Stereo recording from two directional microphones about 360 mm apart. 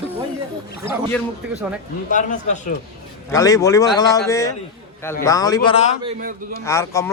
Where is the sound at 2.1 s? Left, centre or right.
Left.